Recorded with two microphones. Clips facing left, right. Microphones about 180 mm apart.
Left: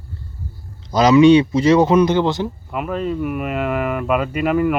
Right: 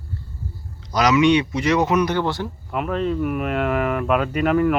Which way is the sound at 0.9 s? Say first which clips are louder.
Left 6 dB; 30° left (ahead or behind).